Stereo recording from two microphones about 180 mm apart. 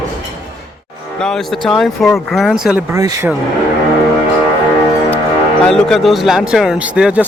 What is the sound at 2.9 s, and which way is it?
Speech, 15° right (ahead or behind).